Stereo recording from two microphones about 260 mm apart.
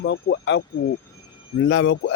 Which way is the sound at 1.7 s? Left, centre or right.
Left.